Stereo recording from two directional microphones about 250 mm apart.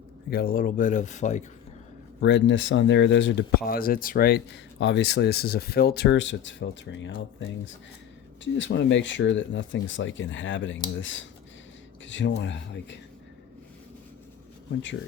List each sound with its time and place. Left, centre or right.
0.3 s speech: left
2.2 s speech: left